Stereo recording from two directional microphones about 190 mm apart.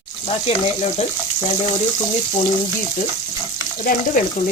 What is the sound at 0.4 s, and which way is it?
Frying, 35° left (ahead or behind).